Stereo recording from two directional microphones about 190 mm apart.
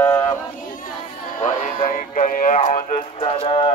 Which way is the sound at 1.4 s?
45° left (ahead or behind).